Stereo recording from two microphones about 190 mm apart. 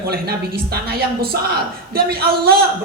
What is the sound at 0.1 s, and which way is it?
Speech, 55° right (ahead or behind).